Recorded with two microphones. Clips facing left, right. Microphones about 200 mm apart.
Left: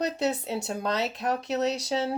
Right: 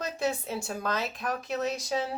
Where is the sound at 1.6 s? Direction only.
75° left (ahead or behind).